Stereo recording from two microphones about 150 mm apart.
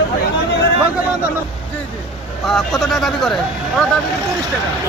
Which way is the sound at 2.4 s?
Centre (ahead or behind).